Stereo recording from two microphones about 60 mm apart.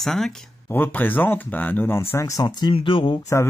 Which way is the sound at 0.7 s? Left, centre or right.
Left.